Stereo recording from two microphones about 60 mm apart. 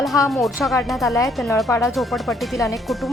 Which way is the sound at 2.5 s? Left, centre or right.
Left.